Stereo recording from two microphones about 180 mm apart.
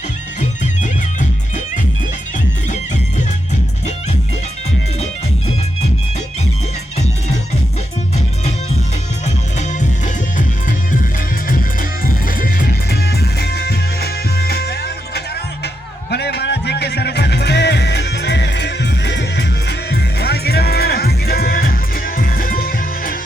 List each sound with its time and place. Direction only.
0.8 s music: 45° left (ahead or behind)
11.5 s music: 50° left (ahead or behind)